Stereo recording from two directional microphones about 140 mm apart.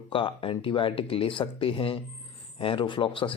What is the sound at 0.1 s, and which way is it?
Speech, 40° left (ahead or behind).